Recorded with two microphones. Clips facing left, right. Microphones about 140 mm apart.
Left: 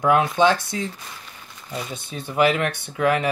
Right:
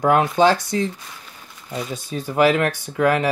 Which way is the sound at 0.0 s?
40° right (ahead or behind).